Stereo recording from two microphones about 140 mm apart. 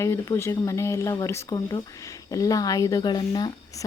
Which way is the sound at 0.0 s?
20° left (ahead or behind).